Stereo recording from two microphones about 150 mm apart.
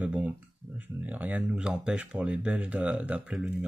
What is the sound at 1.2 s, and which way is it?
Speech, 10° right (ahead or behind).